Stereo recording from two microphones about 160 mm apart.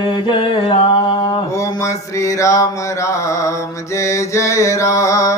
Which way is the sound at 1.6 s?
20° left (ahead or behind).